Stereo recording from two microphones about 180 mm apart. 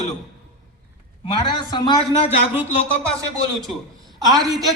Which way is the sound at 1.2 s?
25° left (ahead or behind).